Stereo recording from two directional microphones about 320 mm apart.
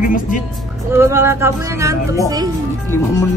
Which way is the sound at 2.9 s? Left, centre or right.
Centre.